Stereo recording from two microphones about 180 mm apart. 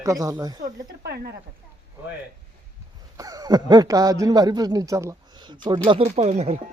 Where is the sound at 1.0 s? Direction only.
65° right (ahead or behind).